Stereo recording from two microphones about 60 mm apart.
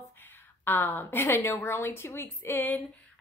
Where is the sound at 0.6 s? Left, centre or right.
Left.